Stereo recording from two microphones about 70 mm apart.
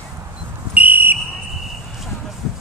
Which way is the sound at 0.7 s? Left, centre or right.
Right.